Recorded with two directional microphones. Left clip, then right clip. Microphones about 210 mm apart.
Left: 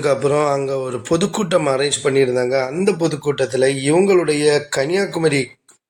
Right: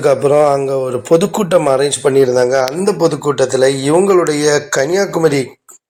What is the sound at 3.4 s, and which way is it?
Speech, centre (ahead or behind).